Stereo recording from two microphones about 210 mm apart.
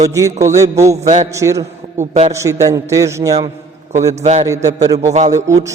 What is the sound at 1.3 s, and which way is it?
A man's voice, 15° right (ahead or behind).